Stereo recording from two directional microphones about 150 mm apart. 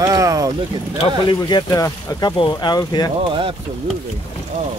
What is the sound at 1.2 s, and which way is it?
Speech, 30° left (ahead or behind).